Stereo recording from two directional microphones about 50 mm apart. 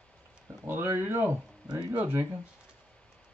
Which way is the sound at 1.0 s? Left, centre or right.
Right.